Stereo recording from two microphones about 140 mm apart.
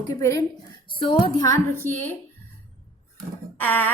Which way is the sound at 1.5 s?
20° left (ahead or behind).